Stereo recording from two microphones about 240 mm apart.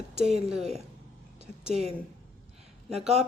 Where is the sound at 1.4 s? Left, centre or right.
Right.